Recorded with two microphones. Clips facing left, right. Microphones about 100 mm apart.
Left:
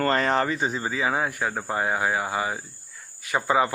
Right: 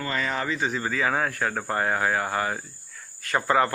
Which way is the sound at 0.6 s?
30° left (ahead or behind).